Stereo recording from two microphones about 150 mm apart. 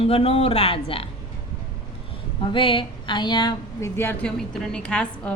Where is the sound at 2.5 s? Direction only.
35° left (ahead or behind).